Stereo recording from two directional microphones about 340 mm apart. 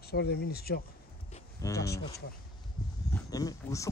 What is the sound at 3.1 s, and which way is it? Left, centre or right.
Speech, centre.